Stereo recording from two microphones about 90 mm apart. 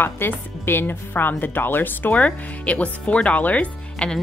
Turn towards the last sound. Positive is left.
turn(degrees=10)  # may be behind; listen again after turning